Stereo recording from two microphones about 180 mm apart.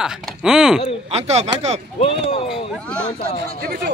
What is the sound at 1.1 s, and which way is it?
Speech, 35° right (ahead or behind).